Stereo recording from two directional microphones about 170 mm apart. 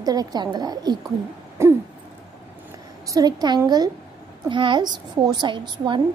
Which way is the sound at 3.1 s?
20° right (ahead or behind).